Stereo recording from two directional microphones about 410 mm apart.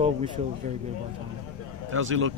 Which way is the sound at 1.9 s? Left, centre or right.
Right.